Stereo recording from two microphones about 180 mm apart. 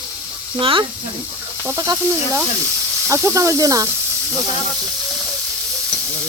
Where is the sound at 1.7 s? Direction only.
15° right (ahead or behind).